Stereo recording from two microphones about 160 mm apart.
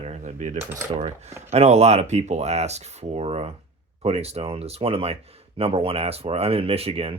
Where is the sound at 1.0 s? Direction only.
40° right (ahead or behind).